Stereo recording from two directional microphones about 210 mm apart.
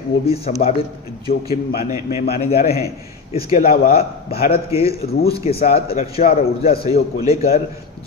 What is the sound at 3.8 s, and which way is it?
A man's voice, 45° left (ahead or behind).